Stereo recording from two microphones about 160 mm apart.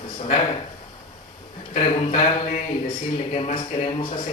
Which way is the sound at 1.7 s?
35° left (ahead or behind).